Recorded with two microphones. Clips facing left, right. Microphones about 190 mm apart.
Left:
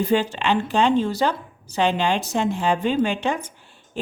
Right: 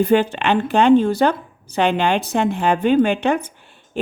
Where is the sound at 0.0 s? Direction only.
55° right (ahead or behind).